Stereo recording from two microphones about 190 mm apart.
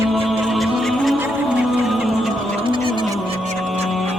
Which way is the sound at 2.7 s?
25° right (ahead or behind).